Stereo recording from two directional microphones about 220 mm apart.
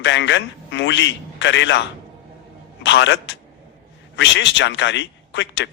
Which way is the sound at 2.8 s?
55° left (ahead or behind).